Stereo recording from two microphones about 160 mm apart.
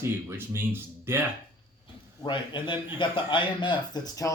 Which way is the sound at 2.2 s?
30° left (ahead or behind).